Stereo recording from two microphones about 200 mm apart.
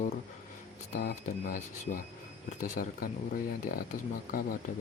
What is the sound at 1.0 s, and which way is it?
Speech, 45° left (ahead or behind).